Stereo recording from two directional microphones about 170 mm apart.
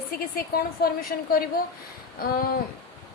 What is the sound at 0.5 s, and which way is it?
Speech, 65° left (ahead or behind).